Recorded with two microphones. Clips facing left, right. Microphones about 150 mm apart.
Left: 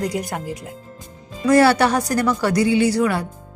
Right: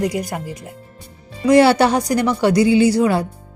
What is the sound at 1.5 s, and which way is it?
A woman's voice, 25° right (ahead or behind).